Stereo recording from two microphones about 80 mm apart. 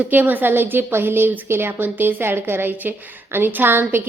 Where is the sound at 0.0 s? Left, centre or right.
Right.